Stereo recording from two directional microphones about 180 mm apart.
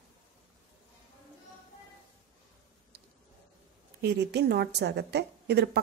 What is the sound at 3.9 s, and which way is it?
A woman's voice, 65° right (ahead or behind).